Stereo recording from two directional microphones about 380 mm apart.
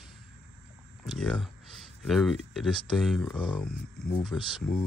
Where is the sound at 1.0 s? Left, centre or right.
Centre.